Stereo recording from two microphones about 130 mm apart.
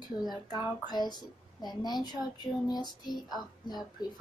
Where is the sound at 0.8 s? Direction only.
35° left (ahead or behind).